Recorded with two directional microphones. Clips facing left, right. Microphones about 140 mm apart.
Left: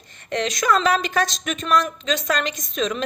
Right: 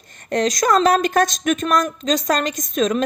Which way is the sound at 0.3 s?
40° right (ahead or behind).